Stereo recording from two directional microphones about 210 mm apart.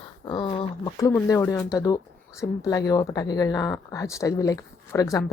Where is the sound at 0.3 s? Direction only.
25° left (ahead or behind).